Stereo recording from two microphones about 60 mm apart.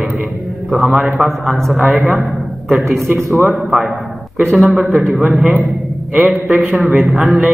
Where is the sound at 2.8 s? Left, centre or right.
Right.